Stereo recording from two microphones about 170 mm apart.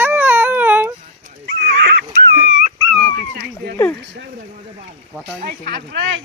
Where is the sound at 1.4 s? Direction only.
75° right (ahead or behind).